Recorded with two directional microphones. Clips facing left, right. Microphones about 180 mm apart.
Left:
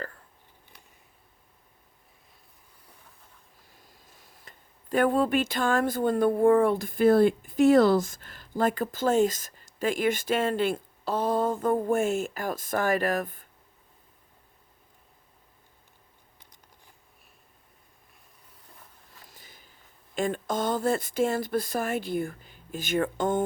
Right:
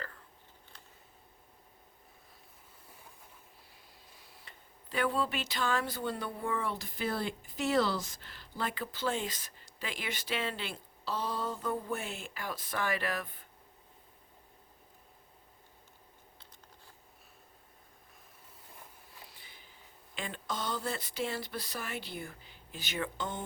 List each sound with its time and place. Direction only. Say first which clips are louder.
4.0 s speech: left 2 dB; 45° left (ahead or behind)
19.2 s sniff: left 3 dB; 45° left (ahead or behind)
20.1 s speech: left 11 dB; 45° left (ahead or behind)